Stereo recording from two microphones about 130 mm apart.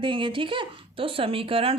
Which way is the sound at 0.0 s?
40° right (ahead or behind).